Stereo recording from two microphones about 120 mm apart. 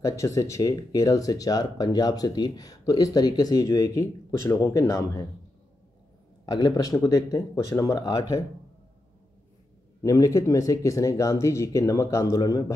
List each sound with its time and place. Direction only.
0.0 s speech: 25° left (ahead or behind)
6.4 s speech: 35° left (ahead or behind)
10.0 s speech: 30° left (ahead or behind)